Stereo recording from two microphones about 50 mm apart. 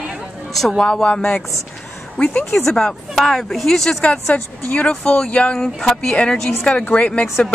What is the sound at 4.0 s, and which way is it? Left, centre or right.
A woman's voice, left.